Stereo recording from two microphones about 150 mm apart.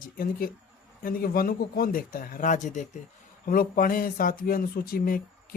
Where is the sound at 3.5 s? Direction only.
70° left (ahead or behind).